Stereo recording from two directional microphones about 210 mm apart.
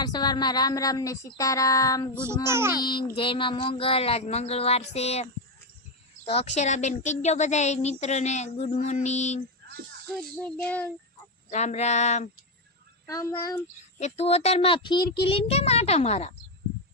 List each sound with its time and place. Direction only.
0.0 s a sound: 20° left (ahead or behind)
2.5 s a child's voice: 10° right (ahead or behind)
2.7 s child singing: 20° left (ahead or behind)
6.2 s speech: 30° left (ahead or behind)
10.2 s a sound: 5° left (ahead or behind)
11.5 s speech: 30° left (ahead or behind)
13.1 s a sound: 15° left (ahead or behind)
14.0 s child singing: 30° left (ahead or behind)
15.2 s speech: 25° left (ahead or behind)